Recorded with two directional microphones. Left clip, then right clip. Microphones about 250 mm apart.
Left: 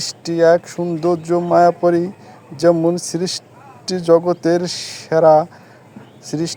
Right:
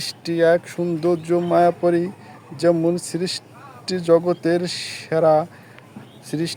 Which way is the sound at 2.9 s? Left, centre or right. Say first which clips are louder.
Left 4 dB; centre.